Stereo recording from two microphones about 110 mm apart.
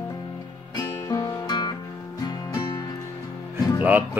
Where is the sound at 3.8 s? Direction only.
15° right (ahead or behind).